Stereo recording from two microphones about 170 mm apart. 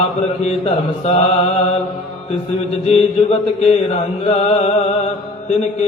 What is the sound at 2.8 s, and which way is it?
Mantra, 35° left (ahead or behind).